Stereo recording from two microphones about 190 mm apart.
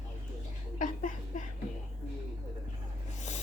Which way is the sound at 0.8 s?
45° left (ahead or behind).